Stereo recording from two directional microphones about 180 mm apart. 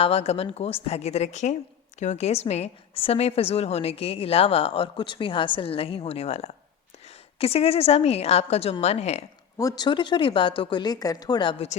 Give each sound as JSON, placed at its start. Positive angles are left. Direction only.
{"t": 0.0, "sound": "a woman's voice", "side_deg": 35}
{"t": 9.6, "sound": "speech", "side_deg": 20}